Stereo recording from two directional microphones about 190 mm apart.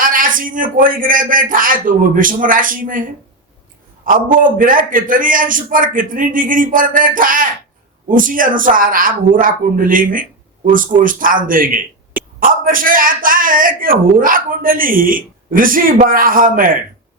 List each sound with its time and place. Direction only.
0.0 s speech: 45° right (ahead or behind)